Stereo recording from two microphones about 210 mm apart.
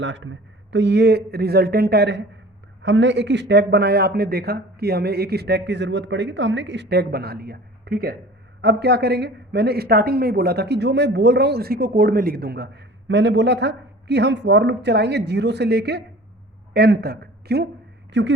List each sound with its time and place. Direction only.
0.0 s a woman's voice: 65° right (ahead or behind)
18.1 s a woman's voice: 60° right (ahead or behind)